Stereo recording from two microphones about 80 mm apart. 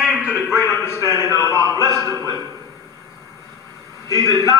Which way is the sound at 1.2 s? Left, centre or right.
Right.